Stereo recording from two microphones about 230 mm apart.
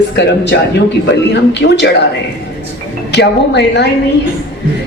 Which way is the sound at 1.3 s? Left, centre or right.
Left.